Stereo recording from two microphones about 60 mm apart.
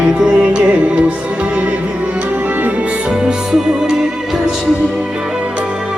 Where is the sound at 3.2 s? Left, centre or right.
Centre.